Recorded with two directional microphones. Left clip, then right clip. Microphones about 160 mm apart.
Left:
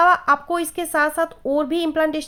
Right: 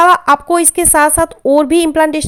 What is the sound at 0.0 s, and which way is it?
Speech, 45° right (ahead or behind).